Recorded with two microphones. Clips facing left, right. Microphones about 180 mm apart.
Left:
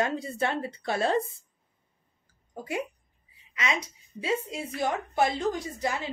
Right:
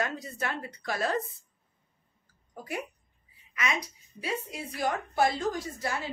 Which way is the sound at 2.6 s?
25° left (ahead or behind).